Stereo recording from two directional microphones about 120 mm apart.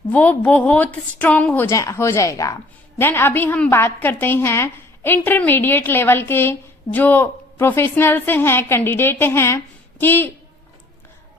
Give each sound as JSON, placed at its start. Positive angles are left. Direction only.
{"t": 0.1, "sound": "a woman's voice", "side_deg": 15}
{"t": 1.7, "sound": "a woman's voice", "side_deg": 25}